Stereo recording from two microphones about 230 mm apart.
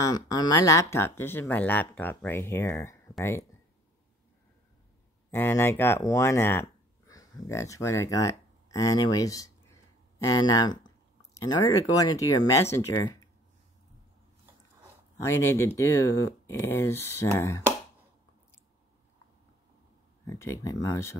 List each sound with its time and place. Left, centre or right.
0.0 s speech: centre
5.3 s speech: centre
15.2 s speech: centre
20.2 s speech: centre